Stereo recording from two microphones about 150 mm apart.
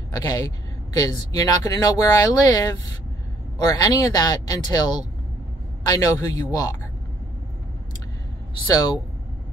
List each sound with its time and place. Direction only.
0.1 s speech: 25° left (ahead or behind)
3.6 s speech: 25° left (ahead or behind)
5.9 s speech: 25° left (ahead or behind)
8.6 s speech: 25° left (ahead or behind)